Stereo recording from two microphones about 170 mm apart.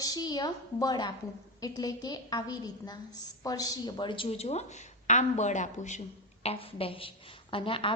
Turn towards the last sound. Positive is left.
turn(degrees=30)  # may be behind; listen again after turning